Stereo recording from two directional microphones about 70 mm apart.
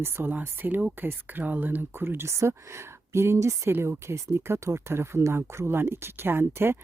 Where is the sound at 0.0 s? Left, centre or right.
Right.